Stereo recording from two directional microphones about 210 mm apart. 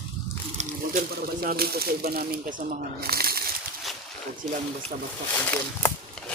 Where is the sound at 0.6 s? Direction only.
40° right (ahead or behind).